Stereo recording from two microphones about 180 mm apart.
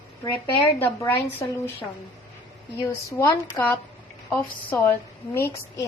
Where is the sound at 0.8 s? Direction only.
10° left (ahead or behind).